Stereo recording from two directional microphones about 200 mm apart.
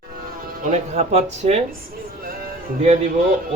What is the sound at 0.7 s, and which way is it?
Speech, 35° right (ahead or behind).